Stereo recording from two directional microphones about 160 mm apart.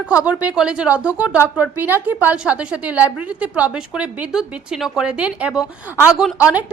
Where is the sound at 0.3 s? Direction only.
10° right (ahead or behind).